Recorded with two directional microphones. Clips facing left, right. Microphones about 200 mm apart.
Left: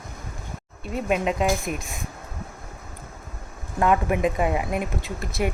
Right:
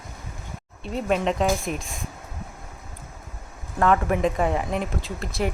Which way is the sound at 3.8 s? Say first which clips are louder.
Even; 10° left (ahead or behind).